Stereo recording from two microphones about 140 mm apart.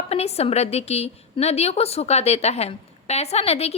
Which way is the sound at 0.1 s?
50° left (ahead or behind).